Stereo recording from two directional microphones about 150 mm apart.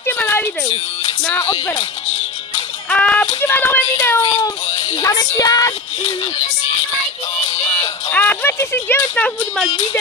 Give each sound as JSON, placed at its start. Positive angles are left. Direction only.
{"t": 0.0, "sound": "a sound", "side_deg": 15}
{"t": 1.2, "sound": "speech", "side_deg": 15}
{"t": 2.9, "sound": "music", "side_deg": 10}
{"t": 3.3, "sound": "speech", "side_deg": 15}
{"t": 4.2, "sound": "child singing", "side_deg": 30}
{"t": 8.1, "sound": "speech", "side_deg": 10}